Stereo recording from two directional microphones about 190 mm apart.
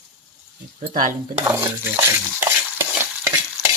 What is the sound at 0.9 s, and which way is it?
Speech, 45° right (ahead or behind).